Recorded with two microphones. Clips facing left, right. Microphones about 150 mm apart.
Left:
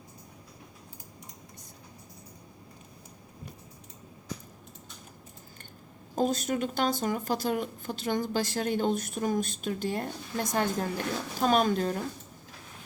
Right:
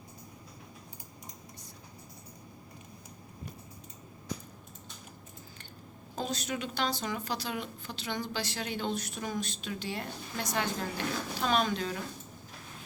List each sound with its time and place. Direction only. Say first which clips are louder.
6.1 s a woman's voice: left 7 dB; 45° left (ahead or behind)